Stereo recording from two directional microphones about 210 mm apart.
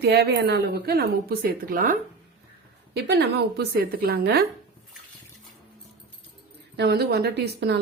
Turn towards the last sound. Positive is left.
turn(degrees=-55)  # may be behind; listen again after turning